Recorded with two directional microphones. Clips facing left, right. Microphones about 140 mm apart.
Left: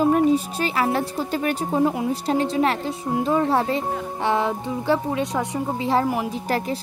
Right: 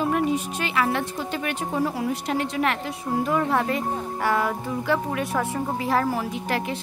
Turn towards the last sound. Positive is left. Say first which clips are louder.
# left 2 dB
turn(degrees=35)  # may be behind; listen again after turning